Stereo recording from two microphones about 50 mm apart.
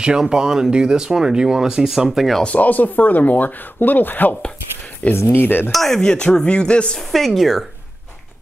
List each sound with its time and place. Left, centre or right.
0.0 s speech: centre
2.4 s speech: left
5.7 s speech: centre
5.9 s speech: centre
7.0 s speech: centre